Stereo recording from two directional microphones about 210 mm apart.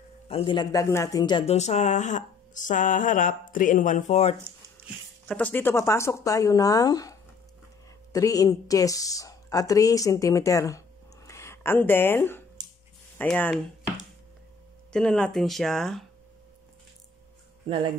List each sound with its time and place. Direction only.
0.3 s speech: 25° left (ahead or behind)
5.3 s a woman's voice: 10° left (ahead or behind)
14.9 s speech: 5° left (ahead or behind)